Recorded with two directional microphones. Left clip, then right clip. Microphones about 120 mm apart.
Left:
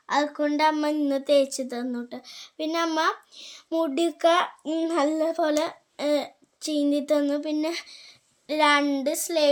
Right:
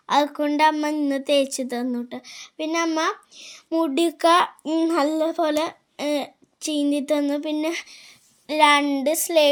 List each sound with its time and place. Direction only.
0.0 s a sound: 45° right (ahead or behind)
0.4 s a child's voice: 25° right (ahead or behind)
0.7 s a child's voice: 15° right (ahead or behind)
3.9 s a child's voice: 40° right (ahead or behind)
8.8 s speech: 15° right (ahead or behind)
9.0 s speech: 35° right (ahead or behind)